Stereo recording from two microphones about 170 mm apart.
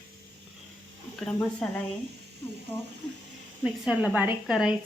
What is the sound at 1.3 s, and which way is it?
Speech, 10° left (ahead or behind).